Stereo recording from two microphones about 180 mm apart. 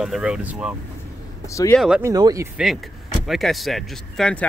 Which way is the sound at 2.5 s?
Centre (ahead or behind).